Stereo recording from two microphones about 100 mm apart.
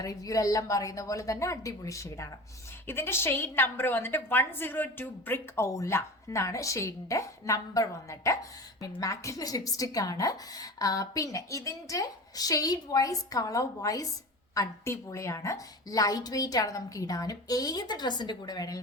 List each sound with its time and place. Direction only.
0.0 s a woman's voice: 35° left (ahead or behind)